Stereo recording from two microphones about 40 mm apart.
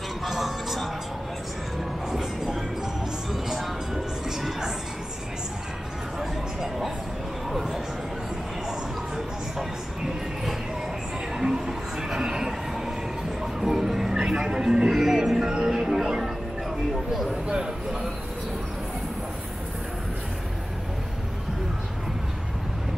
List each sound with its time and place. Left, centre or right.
0.2 s music: centre
2.0 s train: centre
3.4 s music: centre
8.6 s a sound: centre
11.3 s train: centre
13.4 s music: centre
17.1 s a sound: centre